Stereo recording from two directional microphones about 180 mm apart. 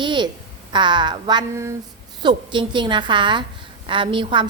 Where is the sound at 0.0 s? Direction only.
25° right (ahead or behind).